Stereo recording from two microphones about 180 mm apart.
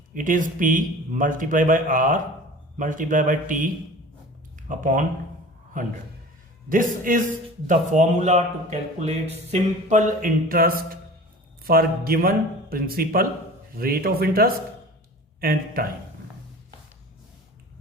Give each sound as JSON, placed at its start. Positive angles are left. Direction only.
{"t": 0.1, "sound": "speech", "side_deg": -50}
{"t": 4.7, "sound": "speech", "side_deg": -45}
{"t": 6.7, "sound": "speech", "side_deg": -50}